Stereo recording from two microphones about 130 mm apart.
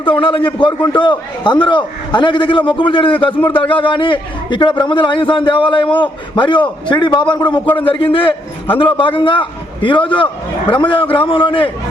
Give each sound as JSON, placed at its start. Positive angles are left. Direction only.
{"t": 0.0, "sound": "a man's voice", "side_deg": 45}